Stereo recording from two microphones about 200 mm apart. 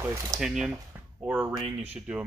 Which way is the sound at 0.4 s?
5° right (ahead or behind).